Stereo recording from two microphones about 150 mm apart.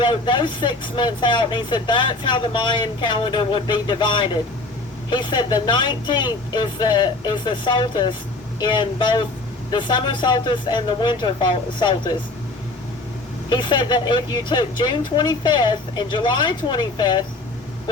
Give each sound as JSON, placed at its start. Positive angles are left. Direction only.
{"t": 0.0, "sound": "speech", "side_deg": 30}
{"t": 13.5, "sound": "speech", "side_deg": 30}